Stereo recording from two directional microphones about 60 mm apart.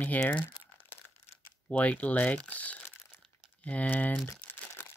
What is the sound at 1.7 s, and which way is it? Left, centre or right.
Speech, left.